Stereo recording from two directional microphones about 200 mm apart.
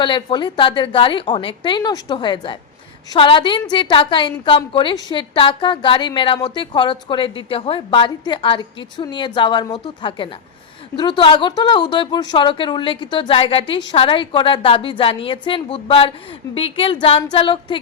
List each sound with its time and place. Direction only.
0.0 s a woman's voice: 25° left (ahead or behind)